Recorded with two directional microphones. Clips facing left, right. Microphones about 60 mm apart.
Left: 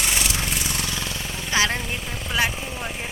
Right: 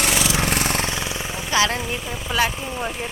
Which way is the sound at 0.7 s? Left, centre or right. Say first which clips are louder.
Right 5 dB; right.